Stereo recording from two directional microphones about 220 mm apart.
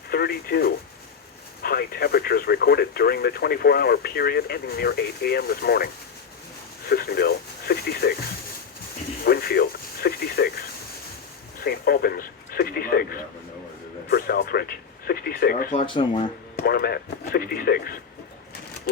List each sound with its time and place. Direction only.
0.1 s speech: 45° left (ahead or behind)
9.2 s a sound: 45° left (ahead or behind)
11.6 s a man's voice: 45° left (ahead or behind)
16.0 s speech: 20° left (ahead or behind)
16.6 s speech: 45° left (ahead or behind)